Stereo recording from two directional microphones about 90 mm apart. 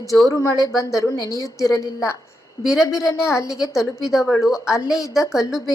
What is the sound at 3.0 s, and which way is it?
Speech, 35° left (ahead or behind).